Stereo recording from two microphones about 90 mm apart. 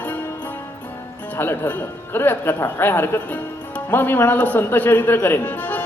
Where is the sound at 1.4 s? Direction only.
20° left (ahead or behind).